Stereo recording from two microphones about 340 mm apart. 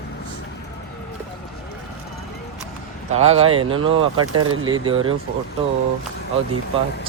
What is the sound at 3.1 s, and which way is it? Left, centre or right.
Speech, centre.